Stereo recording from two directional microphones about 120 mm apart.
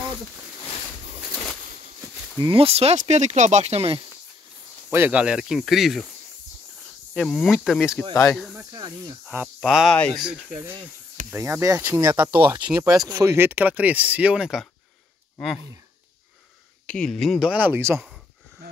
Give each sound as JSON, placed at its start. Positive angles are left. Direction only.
{"t": 2.5, "sound": "speech", "side_deg": -55}
{"t": 4.9, "sound": "speech", "side_deg": -15}
{"t": 7.2, "sound": "speech", "side_deg": 5}
{"t": 8.1, "sound": "speech", "side_deg": 20}
{"t": 8.7, "sound": "speech", "side_deg": -30}
{"t": 9.6, "sound": "speech", "side_deg": -5}
{"t": 10.5, "sound": "speech", "side_deg": -20}
{"t": 13.0, "sound": "speech", "side_deg": -30}
{"t": 15.3, "sound": "speech", "side_deg": 5}
{"t": 16.8, "sound": "speech", "side_deg": 10}
{"t": 17.5, "sound": "speech", "side_deg": -15}